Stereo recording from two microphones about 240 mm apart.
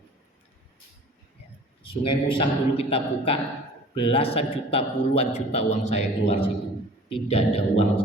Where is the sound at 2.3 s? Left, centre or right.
Left.